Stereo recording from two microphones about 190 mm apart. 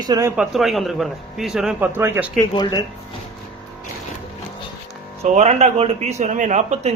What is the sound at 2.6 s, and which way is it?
Speech, 20° left (ahead or behind).